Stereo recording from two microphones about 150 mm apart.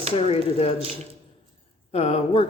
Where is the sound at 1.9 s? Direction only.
45° left (ahead or behind).